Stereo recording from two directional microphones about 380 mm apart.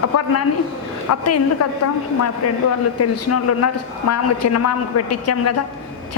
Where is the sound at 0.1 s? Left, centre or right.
Left.